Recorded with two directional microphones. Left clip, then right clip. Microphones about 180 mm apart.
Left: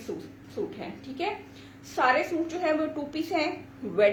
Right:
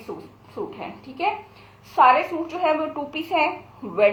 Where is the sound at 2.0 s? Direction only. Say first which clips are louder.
Right 8 dB; 15° left (ahead or behind).